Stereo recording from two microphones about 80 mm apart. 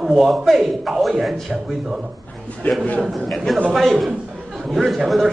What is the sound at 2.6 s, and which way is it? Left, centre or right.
Speech, left.